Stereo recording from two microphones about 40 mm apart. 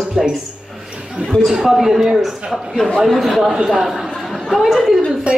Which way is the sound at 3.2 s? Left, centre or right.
Centre.